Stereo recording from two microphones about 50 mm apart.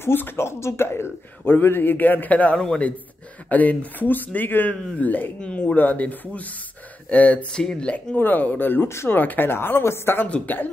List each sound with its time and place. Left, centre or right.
0.0 s a woman's voice: left
0.5 s speech: left
1.4 s speech: left
7.5 s speech: centre
8.2 s speech: left
8.8 s speech: left
9.1 s a woman's voice: left
10.2 s speech: left